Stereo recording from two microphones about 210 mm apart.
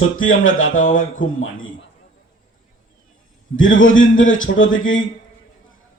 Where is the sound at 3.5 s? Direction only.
70° left (ahead or behind).